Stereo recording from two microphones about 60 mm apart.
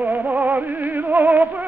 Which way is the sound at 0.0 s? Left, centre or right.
Right.